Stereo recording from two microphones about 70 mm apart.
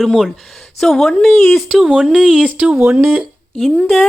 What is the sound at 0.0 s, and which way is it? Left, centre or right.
Speech, centre.